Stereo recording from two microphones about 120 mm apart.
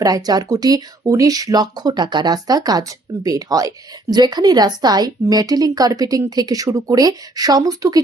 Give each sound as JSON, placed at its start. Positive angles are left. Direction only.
{"t": 0.0, "sound": "speech", "side_deg": -30}